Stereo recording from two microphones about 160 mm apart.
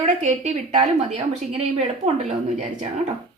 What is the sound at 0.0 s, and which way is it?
A woman's voice, 45° right (ahead or behind).